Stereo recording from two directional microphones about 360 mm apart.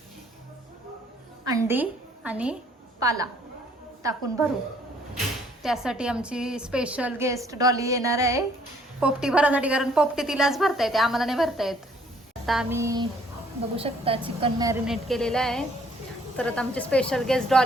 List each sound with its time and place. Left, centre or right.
1.5 s a woman's voice: centre
3.0 s child singing: centre
5.6 s a woman's voice: centre
12.5 s child singing: centre
14.4 s a woman's voice: centre